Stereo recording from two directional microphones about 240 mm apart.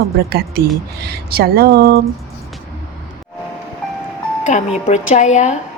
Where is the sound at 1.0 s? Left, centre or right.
Right.